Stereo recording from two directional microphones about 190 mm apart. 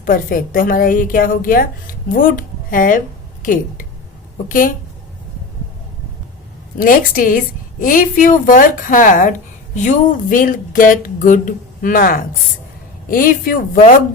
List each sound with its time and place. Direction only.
0.0 s a woman's voice: 45° left (ahead or behind)
6.7 s a woman's voice: 45° left (ahead or behind)